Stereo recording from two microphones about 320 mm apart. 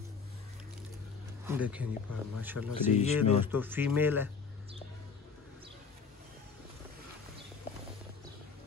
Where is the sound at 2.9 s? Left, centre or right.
Left.